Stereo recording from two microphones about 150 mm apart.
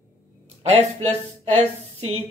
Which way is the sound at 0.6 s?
45° right (ahead or behind).